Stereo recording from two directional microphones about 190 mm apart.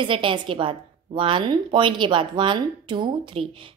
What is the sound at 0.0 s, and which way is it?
A woman's voice, 25° right (ahead or behind).